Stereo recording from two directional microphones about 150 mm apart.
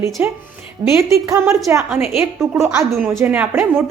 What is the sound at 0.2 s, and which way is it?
A woman's voice, 10° right (ahead or behind).